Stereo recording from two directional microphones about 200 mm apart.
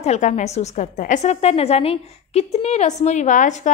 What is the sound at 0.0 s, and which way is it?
A woman's voice, 35° left (ahead or behind).